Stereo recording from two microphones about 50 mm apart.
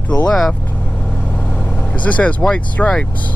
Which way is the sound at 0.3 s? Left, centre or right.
Centre.